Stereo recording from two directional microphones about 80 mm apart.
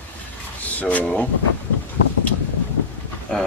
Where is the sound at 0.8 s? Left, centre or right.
Centre.